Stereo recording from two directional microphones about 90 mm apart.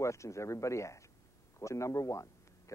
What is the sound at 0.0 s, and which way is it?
A man's voice, 35° left (ahead or behind).